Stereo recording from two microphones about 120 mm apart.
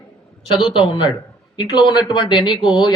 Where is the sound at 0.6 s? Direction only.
40° left (ahead or behind).